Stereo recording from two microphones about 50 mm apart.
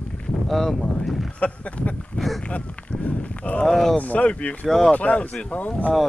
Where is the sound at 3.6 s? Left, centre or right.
Centre.